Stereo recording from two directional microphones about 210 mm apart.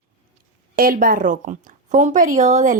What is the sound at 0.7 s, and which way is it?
A woman's voice, 45° right (ahead or behind).